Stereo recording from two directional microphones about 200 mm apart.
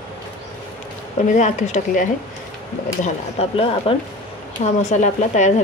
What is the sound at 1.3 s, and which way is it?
Speech, 40° left (ahead or behind).